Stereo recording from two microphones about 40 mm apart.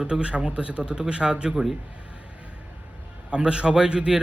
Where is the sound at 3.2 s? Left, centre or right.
Right.